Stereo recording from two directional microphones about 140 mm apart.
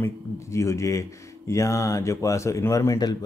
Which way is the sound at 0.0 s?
20° left (ahead or behind).